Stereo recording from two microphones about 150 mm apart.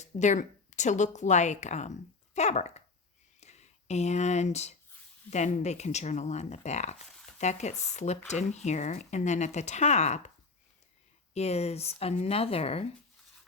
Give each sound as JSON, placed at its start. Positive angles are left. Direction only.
{"t": 0.0, "sound": "a woman's voice", "side_deg": 55}
{"t": 11.3, "sound": "speech", "side_deg": 45}